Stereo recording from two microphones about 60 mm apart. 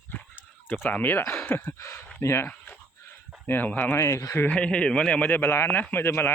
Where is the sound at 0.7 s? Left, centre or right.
Left.